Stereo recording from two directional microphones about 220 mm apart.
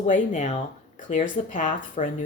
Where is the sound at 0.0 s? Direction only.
30° left (ahead or behind).